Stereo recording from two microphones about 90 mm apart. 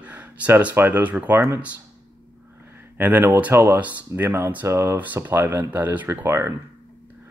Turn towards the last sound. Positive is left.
turn(degrees=-25)  # may be behind; listen again after turning